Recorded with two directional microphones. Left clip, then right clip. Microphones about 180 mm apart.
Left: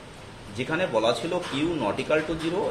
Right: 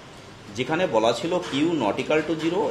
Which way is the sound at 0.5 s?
35° right (ahead or behind).